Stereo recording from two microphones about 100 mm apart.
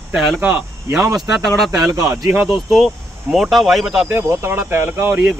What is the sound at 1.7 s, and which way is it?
Speech, 35° right (ahead or behind).